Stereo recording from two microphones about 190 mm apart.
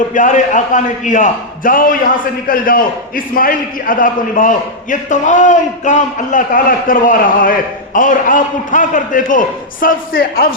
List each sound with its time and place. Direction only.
0.1 s a man's voice: 40° left (ahead or behind)